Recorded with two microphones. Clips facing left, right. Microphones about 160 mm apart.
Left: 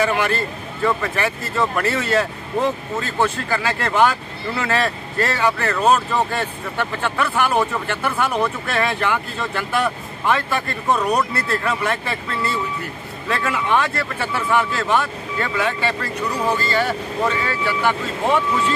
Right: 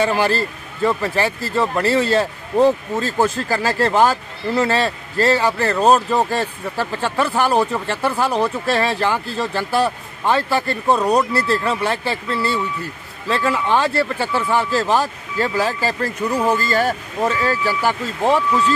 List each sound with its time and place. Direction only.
0.0 s speech: 35° right (ahead or behind)